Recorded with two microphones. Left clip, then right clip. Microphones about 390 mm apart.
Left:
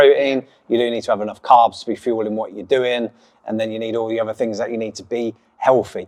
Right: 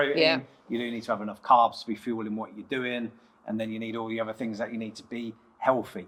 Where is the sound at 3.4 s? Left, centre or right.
Left.